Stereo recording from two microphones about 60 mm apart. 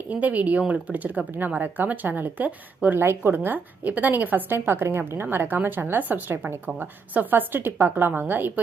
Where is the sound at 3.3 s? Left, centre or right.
Right.